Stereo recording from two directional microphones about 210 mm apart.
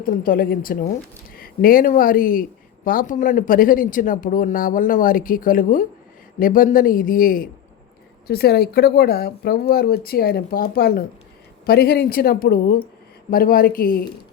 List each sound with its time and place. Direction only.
0.0 s speech: 40° left (ahead or behind)